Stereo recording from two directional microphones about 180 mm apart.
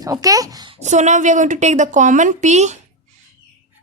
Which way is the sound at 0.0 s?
20° right (ahead or behind).